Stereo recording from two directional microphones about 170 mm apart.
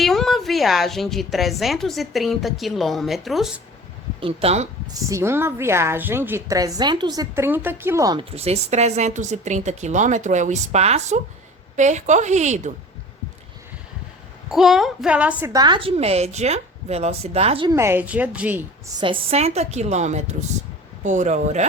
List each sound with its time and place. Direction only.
0.0 s a woman's voice: centre (ahead or behind)
4.2 s a woman's voice: 35° right (ahead or behind)
4.9 s a woman's voice: 20° right (ahead or behind)
8.2 s speech: 35° right (ahead or behind)
14.5 s a woman's voice: centre (ahead or behind)
15.5 s a woman's voice: 25° right (ahead or behind)
17.7 s a woman's voice: 15° right (ahead or behind)
18.9 s a woman's voice: 30° right (ahead or behind)